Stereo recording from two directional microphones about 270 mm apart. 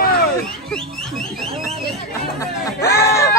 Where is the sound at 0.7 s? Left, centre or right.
Centre.